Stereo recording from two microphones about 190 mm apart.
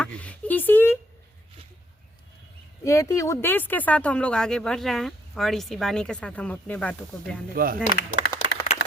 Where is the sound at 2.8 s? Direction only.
15° left (ahead or behind).